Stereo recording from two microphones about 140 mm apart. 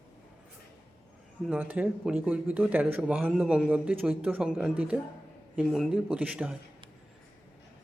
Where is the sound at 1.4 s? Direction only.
10° right (ahead or behind).